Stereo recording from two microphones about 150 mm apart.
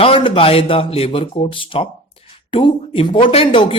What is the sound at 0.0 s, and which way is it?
Speech, 35° left (ahead or behind).